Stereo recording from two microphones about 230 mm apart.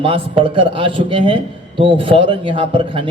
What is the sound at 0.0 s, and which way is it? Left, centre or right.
Speech, right.